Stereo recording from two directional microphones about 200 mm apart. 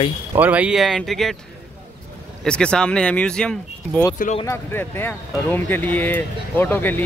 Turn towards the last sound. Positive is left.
turn(degrees=10)  # may be behind; listen again after turning